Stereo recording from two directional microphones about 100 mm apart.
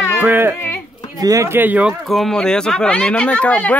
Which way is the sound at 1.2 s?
35° right (ahead or behind).